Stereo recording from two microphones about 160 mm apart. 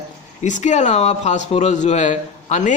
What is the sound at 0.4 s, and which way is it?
Speech, 50° left (ahead or behind).